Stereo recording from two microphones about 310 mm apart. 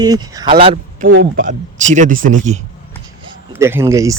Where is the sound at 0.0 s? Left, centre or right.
Centre.